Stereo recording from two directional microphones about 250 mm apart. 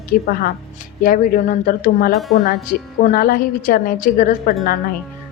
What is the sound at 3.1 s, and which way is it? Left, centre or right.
A woman's voice, left.